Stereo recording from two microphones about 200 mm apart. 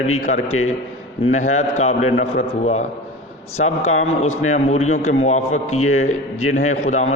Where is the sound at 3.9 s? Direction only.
35° left (ahead or behind).